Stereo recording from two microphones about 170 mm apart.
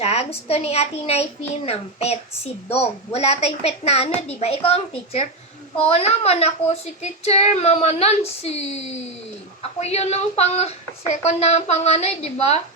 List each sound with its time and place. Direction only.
0.0 s a child's voice: 40° left (ahead or behind)